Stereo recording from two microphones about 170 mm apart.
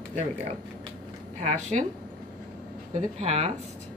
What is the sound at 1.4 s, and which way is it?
Speech, 45° right (ahead or behind).